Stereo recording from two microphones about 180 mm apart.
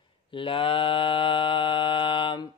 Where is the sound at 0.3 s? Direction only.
30° left (ahead or behind).